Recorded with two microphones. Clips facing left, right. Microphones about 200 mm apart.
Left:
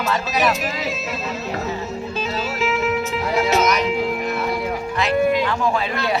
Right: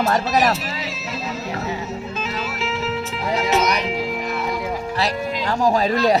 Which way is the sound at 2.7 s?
35° right (ahead or behind).